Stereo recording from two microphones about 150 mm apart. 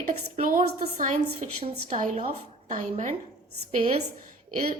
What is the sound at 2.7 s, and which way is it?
A woman's voice, 50° right (ahead or behind).